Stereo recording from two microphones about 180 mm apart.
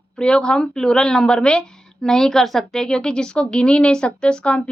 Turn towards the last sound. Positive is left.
turn(degrees=5)  # may be behind; listen again after turning